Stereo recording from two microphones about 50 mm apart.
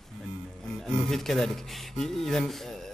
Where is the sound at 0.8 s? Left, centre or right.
Centre.